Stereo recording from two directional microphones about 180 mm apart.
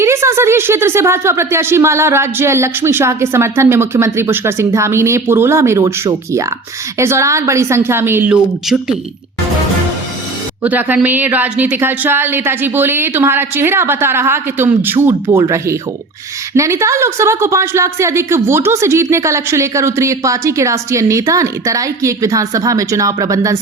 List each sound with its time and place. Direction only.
0.0 s a woman's voice: 15° right (ahead or behind)
10.6 s a woman's voice: 10° right (ahead or behind)